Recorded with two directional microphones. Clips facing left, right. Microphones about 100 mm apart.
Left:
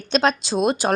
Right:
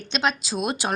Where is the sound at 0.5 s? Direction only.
25° left (ahead or behind).